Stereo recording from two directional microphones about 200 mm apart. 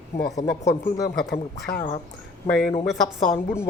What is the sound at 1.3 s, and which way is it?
A woman's voice, 50° left (ahead or behind).